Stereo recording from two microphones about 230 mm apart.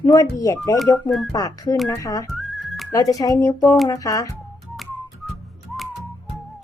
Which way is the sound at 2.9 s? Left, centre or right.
Centre.